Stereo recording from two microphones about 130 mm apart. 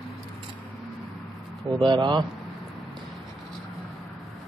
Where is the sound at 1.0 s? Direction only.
Centre (ahead or behind).